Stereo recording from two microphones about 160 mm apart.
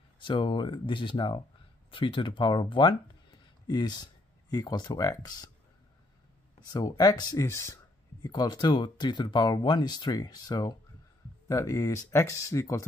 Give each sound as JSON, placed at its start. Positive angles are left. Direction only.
{"t": 0.2, "sound": "speech", "side_deg": 30}
{"t": 6.7, "sound": "speech", "side_deg": 25}